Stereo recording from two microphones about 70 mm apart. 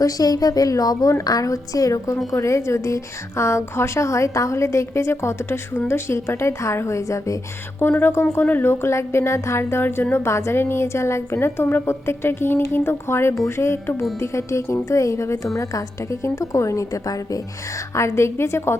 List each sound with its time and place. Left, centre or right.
0.0 s a woman's voice: left
7.8 s a woman's voice: left
17.9 s speech: left